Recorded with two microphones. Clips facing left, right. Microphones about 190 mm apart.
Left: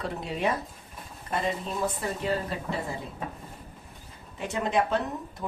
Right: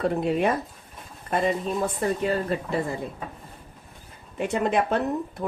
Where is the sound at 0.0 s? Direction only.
55° right (ahead or behind).